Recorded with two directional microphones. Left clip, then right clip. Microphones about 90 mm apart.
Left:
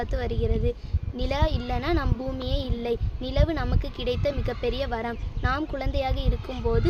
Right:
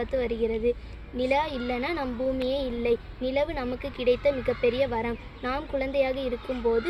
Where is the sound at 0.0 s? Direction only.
55° left (ahead or behind).